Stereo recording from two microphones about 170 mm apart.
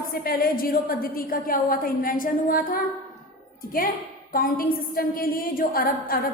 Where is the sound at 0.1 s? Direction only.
60° left (ahead or behind).